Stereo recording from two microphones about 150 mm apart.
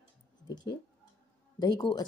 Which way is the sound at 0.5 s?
25° left (ahead or behind).